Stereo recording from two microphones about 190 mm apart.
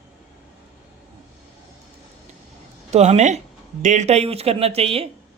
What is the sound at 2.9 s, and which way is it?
Speech, 35° right (ahead or behind).